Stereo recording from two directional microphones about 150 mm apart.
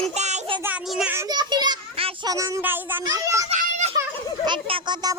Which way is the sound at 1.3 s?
30° right (ahead or behind).